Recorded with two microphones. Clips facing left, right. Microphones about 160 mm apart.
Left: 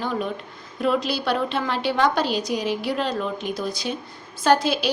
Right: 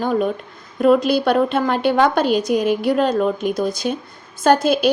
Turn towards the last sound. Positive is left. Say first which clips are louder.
# right 5 dB
turn(degrees=-50)  # may be behind; listen again after turning